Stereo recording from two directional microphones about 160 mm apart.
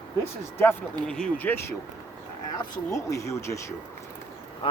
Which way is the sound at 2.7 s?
20° left (ahead or behind).